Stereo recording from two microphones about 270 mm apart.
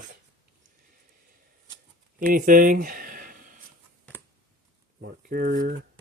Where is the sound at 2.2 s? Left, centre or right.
Right.